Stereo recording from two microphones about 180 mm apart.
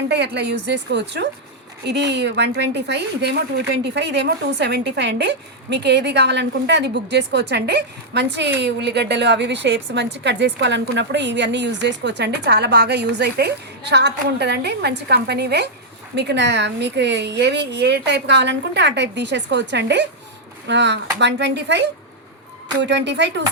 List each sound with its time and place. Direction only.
0.1 s a woman's voice: 70° right (ahead or behind)